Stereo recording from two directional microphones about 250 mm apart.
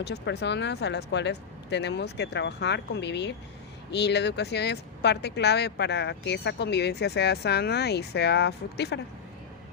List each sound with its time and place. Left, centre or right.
0.0 s speech: left